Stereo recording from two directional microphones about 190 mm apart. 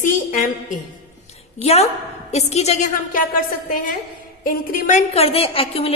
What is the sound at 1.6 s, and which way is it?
A woman's voice, 35° left (ahead or behind).